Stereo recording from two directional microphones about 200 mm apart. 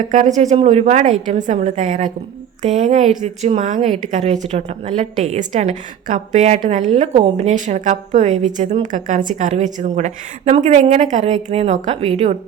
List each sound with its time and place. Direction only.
0.0 s a woman's voice: 40° right (ahead or behind)